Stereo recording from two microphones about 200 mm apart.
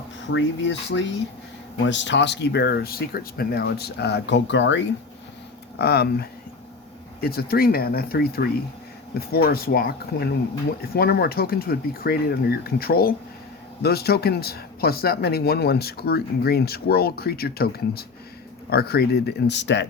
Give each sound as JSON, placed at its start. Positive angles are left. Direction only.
{"t": 0.3, "sound": "speech", "side_deg": 65}
{"t": 5.8, "sound": "speech", "side_deg": 50}